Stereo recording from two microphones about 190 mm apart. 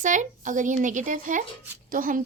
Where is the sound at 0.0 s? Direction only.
40° right (ahead or behind).